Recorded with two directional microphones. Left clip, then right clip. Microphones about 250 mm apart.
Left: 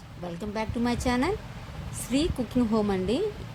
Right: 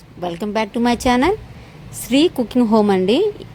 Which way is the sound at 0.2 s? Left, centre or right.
Right.